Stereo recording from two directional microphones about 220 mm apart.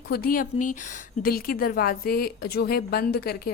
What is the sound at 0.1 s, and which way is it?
Speech, 40° left (ahead or behind).